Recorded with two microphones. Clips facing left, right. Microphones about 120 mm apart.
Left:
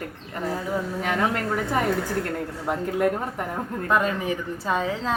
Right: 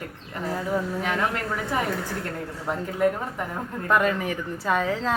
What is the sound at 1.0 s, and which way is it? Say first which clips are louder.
Speech: left 1 dB; 45° left (ahead or behind).